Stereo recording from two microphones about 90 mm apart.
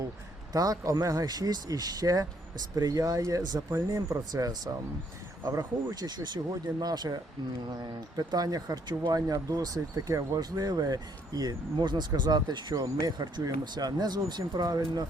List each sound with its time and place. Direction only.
0.5 s speech: 40° right (ahead or behind)
9.2 s speech: 40° right (ahead or behind)